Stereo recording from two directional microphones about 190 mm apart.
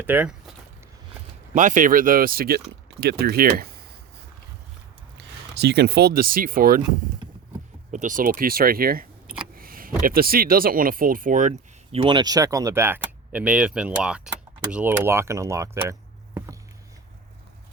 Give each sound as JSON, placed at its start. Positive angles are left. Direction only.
{"t": 0.0, "sound": "speech", "side_deg": -10}
{"t": 1.5, "sound": "speech", "side_deg": -40}
{"t": 5.5, "sound": "speech", "side_deg": -60}
{"t": 7.9, "sound": "speech", "side_deg": -40}
{"t": 12.0, "sound": "speech", "side_deg": -20}